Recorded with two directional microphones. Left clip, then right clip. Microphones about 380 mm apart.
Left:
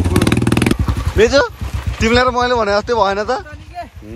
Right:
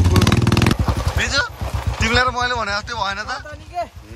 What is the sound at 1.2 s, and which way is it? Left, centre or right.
A man's voice, centre.